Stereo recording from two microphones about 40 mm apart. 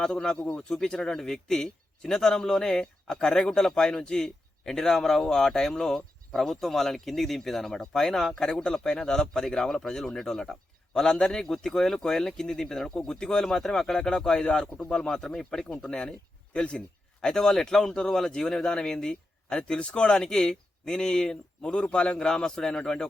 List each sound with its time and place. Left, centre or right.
0.0 s a man's voice: centre
17.2 s speech: centre
21.6 s a man's voice: left
22.3 s a man's voice: centre